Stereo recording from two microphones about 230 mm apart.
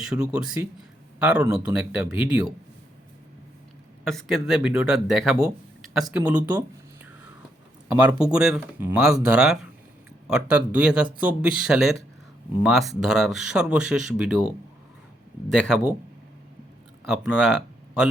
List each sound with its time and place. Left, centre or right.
0.0 s speech: centre
4.0 s speech: centre
7.9 s speech: centre
8.2 s speech: centre
15.5 s speech: centre
17.1 s speech: centre